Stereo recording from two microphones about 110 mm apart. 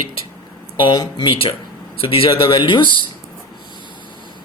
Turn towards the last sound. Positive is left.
turn(degrees=50)  # may be behind; listen again after turning